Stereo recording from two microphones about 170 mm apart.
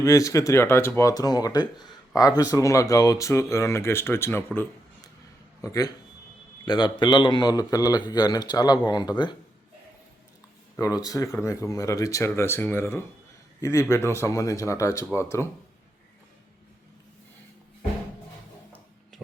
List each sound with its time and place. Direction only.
0.0 s speech: 20° left (ahead or behind)
5.6 s speech: 20° left (ahead or behind)
10.8 s speech: 20° left (ahead or behind)